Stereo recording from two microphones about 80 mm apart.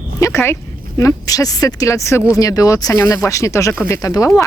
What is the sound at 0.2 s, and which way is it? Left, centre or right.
Speech, left.